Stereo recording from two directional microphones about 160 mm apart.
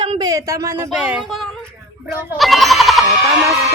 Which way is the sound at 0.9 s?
5° right (ahead or behind).